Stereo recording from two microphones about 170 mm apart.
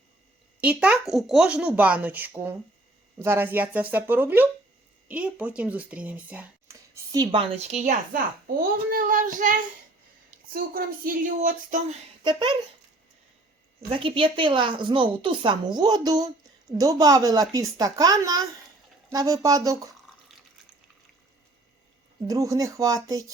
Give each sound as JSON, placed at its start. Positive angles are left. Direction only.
{"t": 0.6, "sound": "speech", "side_deg": -10}
{"t": 7.7, "sound": "child singing", "side_deg": -45}
{"t": 10.5, "sound": "speech", "side_deg": -55}
{"t": 12.2, "sound": "a woman's voice", "side_deg": -25}
{"t": 13.9, "sound": "a woman's voice", "side_deg": -30}
{"t": 22.3, "sound": "a woman's voice", "side_deg": -20}